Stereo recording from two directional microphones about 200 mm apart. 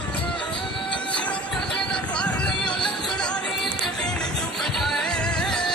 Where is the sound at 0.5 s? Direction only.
25° left (ahead or behind).